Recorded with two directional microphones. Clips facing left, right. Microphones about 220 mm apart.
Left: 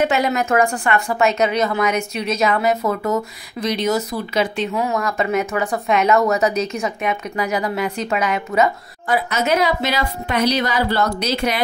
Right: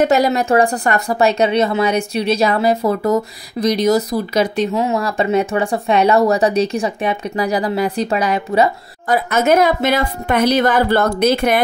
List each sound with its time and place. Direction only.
0.0 s speech: 40° right (ahead or behind)
4.7 s speech: 30° right (ahead or behind); by 11.6 s 50° right (ahead or behind)